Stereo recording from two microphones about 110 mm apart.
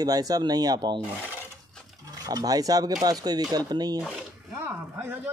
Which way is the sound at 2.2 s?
35° right (ahead or behind).